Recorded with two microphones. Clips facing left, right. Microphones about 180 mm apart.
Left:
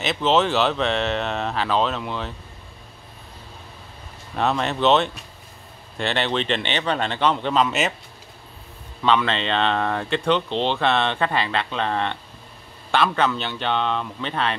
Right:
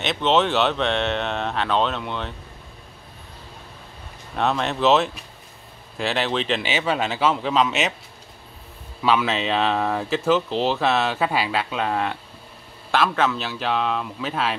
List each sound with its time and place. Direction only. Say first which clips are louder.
0.0 s speech: even; centre (ahead or behind)
4.4 s speech: even; centre (ahead or behind)
9.0 s speech: even; 5° right (ahead or behind)